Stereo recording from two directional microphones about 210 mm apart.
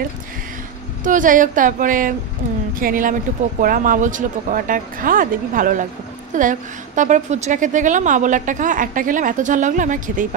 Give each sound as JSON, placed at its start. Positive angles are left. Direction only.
{"t": 1.0, "sound": "a woman's voice", "side_deg": -40}